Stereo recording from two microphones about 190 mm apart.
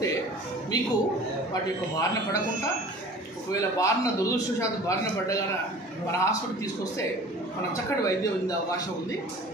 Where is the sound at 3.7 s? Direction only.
15° left (ahead or behind).